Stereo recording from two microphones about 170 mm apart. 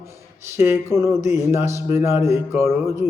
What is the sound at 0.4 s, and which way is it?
Mantra, 15° right (ahead or behind).